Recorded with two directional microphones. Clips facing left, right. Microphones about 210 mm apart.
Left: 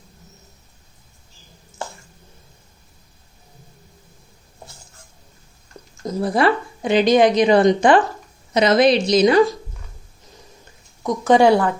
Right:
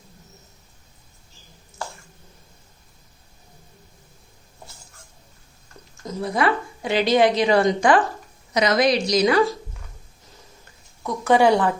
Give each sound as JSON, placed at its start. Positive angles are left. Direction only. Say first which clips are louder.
{"t": 6.2, "sound": "speech", "louder": "left 4 dB", "side_deg": 30}
{"t": 6.8, "sound": "a woman's voice", "louder": "left 4 dB", "side_deg": 20}
{"t": 11.0, "sound": "a woman's voice", "louder": "left 3 dB", "side_deg": 15}